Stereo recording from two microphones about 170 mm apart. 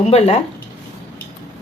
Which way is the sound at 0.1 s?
40° left (ahead or behind).